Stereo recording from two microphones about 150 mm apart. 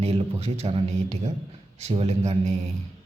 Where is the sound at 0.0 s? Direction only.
40° right (ahead or behind).